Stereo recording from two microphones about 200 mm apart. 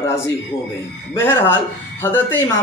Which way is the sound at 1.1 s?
10° left (ahead or behind).